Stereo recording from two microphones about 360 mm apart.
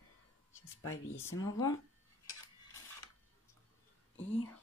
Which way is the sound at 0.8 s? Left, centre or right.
Left.